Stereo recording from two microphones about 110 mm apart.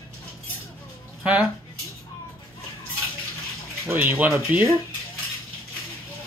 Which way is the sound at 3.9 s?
15° right (ahead or behind).